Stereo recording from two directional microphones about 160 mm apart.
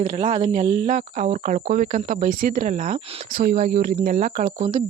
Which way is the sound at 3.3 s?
65° right (ahead or behind).